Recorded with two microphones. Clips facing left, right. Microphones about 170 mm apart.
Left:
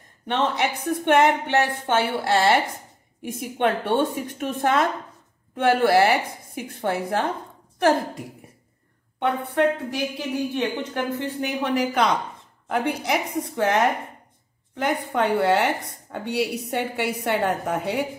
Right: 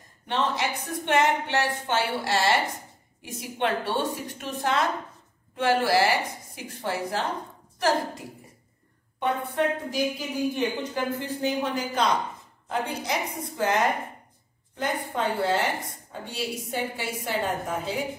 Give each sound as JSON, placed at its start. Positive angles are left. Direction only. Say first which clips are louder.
{"t": 0.3, "sound": "a woman's voice", "louder": "left 4 dB", "side_deg": 60}
{"t": 9.2, "sound": "a woman's voice", "louder": "left 4 dB", "side_deg": 70}
{"t": 14.8, "sound": "a woman's voice", "louder": "left 5 dB", "side_deg": 70}